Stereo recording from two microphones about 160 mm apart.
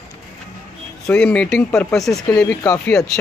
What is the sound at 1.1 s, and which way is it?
Speech, 5° left (ahead or behind).